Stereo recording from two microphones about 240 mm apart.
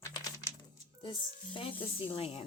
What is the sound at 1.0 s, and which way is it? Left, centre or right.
Speech, left.